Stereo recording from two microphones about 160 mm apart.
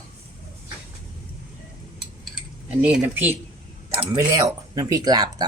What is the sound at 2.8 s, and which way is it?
Speech, 10° right (ahead or behind).